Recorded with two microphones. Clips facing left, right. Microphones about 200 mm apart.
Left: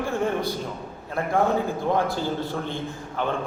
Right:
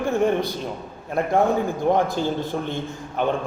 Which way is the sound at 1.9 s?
20° right (ahead or behind).